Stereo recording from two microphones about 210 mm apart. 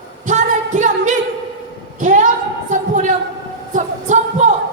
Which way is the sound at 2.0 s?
35° right (ahead or behind).